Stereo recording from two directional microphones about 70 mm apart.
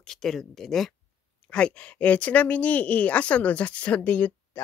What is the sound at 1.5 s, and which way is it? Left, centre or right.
Speech, centre.